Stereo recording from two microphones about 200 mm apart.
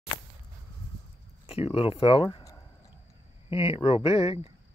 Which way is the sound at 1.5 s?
30° left (ahead or behind).